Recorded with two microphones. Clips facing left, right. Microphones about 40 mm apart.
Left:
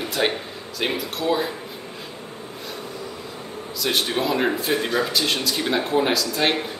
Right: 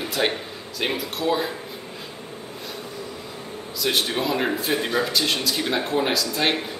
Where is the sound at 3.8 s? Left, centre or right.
Centre.